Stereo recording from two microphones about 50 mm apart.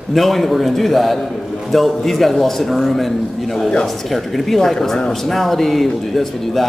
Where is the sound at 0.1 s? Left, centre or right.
Centre.